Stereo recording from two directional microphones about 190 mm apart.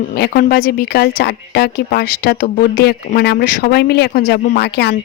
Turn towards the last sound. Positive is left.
turn(degrees=60)  # may be behind; listen again after turning